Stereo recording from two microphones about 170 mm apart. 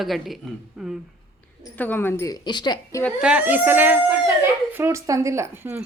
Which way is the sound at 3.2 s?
10° right (ahead or behind).